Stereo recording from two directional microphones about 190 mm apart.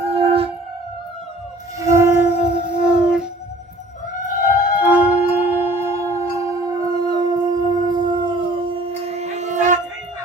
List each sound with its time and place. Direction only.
0.1 s music: 30° right (ahead or behind)
1.8 s music: 15° right (ahead or behind)
4.8 s music: 10° right (ahead or behind); by 9.7 s 40° right (ahead or behind)